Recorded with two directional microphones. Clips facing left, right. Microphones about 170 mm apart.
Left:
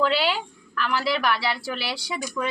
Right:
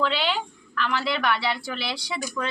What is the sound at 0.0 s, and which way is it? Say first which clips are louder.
A woman's voice: left 2 dB; 5° left (ahead or behind).